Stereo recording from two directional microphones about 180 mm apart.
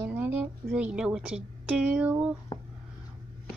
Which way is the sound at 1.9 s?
5° right (ahead or behind).